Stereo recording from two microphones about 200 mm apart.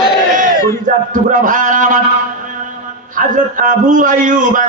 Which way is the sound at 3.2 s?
40° right (ahead or behind).